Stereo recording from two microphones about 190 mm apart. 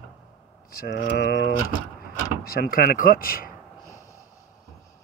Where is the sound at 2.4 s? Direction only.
50° left (ahead or behind).